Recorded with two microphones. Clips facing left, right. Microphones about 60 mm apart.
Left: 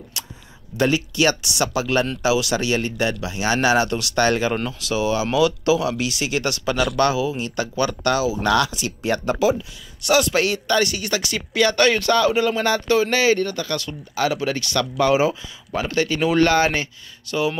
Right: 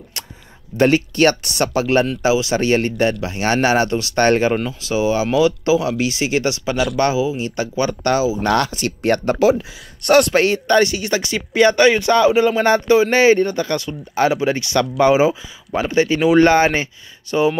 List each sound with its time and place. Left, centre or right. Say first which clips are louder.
0.7 s speech: right 5 dB; right
4.8 s speech: right 3 dB; right